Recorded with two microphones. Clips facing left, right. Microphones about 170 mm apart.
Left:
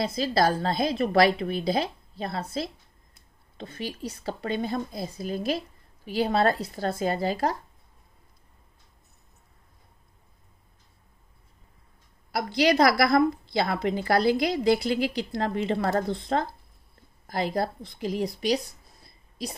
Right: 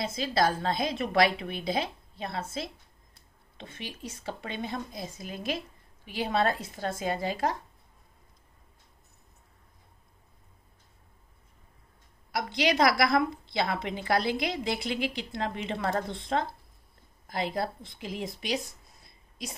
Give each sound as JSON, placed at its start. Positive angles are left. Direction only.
{"t": 0.0, "sound": "a woman's voice", "side_deg": 35}
{"t": 12.3, "sound": "a woman's voice", "side_deg": 35}
{"t": 19.0, "sound": "a sound", "side_deg": 35}